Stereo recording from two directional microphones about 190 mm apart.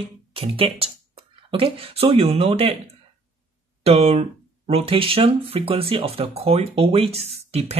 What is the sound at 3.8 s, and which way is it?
Speech, 30° right (ahead or behind).